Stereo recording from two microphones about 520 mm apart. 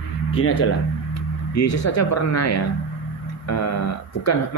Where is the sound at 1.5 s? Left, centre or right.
Left.